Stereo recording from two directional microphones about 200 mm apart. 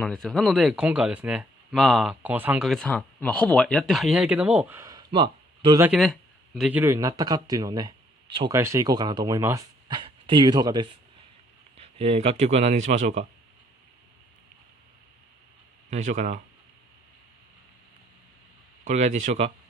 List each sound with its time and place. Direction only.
0.0 s speech: 5° left (ahead or behind)
2.7 s speech: 5° left (ahead or behind); by 5.9 s 20° right (ahead or behind)
5.9 s speech: centre (ahead or behind)
6.8 s speech: 15° right (ahead or behind)
11.8 s a man's voice: 30° right (ahead or behind)
15.9 s a man's voice: 35° right (ahead or behind)
18.9 s a man's voice: 35° right (ahead or behind)